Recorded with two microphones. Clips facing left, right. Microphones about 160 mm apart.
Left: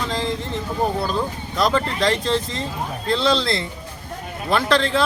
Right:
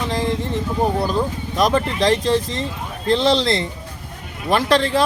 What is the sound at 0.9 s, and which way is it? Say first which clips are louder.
A man's voice: right 3 dB; 15° right (ahead or behind).